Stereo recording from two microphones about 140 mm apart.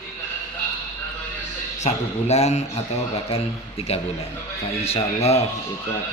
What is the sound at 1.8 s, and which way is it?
Speech, 50° left (ahead or behind).